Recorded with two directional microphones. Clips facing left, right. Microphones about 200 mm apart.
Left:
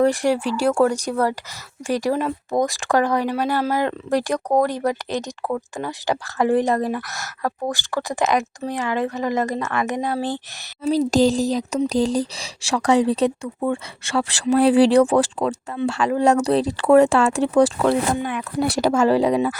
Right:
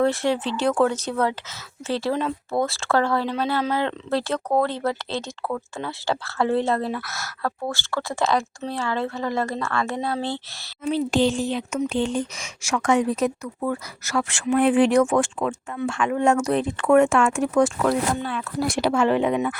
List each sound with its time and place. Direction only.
0.0 s speech: 15° left (ahead or behind)
11.1 s speech: 40° left (ahead or behind)
18.2 s speech: 15° left (ahead or behind)
18.8 s speech: 40° left (ahead or behind)